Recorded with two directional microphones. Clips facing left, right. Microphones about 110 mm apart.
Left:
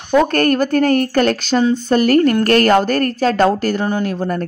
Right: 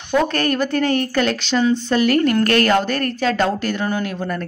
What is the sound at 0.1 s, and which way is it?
A woman's voice, 45° left (ahead or behind).